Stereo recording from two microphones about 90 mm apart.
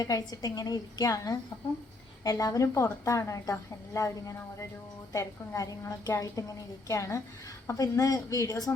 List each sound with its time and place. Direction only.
0.0 s a woman's voice: 45° left (ahead or behind)